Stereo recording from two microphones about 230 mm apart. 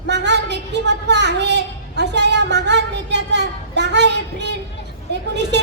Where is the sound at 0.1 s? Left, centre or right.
Right.